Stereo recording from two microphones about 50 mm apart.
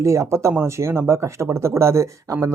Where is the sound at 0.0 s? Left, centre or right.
Right.